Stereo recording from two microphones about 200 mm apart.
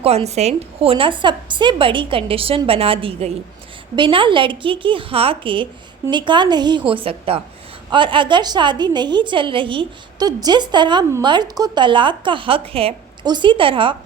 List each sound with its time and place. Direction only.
0.0 s a woman's voice: 30° right (ahead or behind)